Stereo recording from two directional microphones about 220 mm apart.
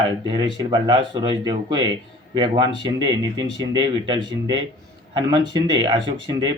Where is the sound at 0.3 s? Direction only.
20° right (ahead or behind).